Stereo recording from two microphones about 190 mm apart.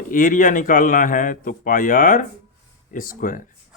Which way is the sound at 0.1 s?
45° left (ahead or behind).